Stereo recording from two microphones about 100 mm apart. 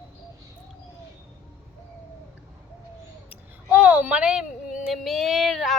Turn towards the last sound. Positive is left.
turn(degrees=0)  # may be behind; listen again after turning